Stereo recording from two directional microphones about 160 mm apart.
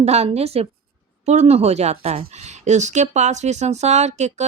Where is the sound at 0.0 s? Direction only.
40° right (ahead or behind).